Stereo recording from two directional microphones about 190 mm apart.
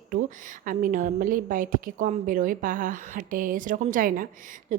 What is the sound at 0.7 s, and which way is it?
A woman's voice, 45° right (ahead or behind).